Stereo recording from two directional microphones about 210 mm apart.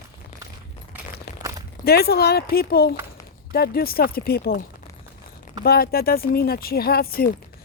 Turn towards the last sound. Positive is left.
turn(degrees=45)  # may be behind; listen again after turning